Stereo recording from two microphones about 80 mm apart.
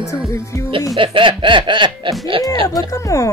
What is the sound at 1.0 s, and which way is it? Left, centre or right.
Snicker, right.